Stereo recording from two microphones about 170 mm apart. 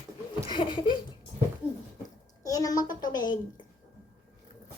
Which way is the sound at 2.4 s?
20° left (ahead or behind).